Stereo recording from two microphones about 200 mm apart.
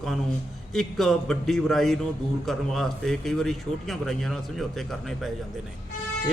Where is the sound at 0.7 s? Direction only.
Centre (ahead or behind).